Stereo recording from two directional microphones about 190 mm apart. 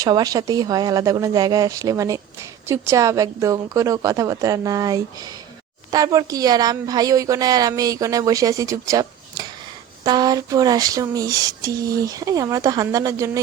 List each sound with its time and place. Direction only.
0.0 s a woman's voice: 20° right (ahead or behind)